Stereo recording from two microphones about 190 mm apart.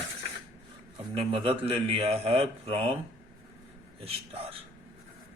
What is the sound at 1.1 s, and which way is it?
Speech, 30° right (ahead or behind).